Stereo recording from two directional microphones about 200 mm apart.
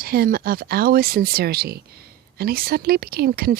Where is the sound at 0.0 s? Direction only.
45° right (ahead or behind).